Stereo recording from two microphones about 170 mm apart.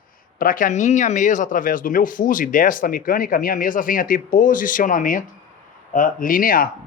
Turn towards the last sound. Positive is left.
turn(degrees=55)  # may be behind; listen again after turning